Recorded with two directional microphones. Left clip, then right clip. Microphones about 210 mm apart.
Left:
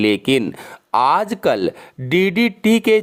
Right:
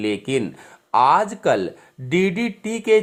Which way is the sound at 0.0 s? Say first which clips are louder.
Left 6 dB; 40° left (ahead or behind).